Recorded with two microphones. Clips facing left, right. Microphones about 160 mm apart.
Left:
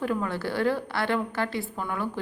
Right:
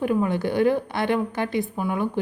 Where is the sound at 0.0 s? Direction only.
20° right (ahead or behind).